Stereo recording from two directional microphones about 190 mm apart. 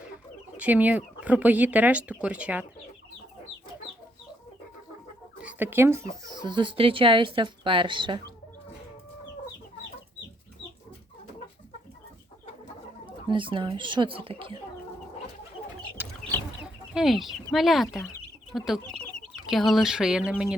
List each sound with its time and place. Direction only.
0.5 s speech: 10° right (ahead or behind)
5.4 s speech: 10° right (ahead or behind); by 8.3 s 25° right (ahead or behind)
13.1 s speech: 25° right (ahead or behind)
16.0 s chicken: 10° right (ahead or behind)
16.9 s speech: centre (ahead or behind)